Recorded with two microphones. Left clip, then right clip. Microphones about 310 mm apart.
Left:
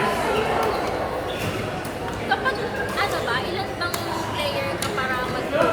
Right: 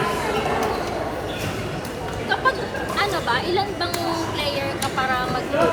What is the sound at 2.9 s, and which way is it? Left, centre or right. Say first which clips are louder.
Chatter: right 3 dB; centre.